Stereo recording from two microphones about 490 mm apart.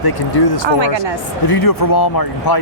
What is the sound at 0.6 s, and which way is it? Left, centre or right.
Speech, right.